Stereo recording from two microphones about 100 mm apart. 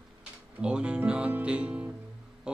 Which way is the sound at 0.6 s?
10° right (ahead or behind).